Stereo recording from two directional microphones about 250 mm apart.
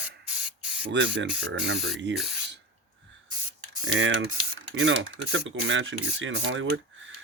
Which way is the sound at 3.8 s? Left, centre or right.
Right.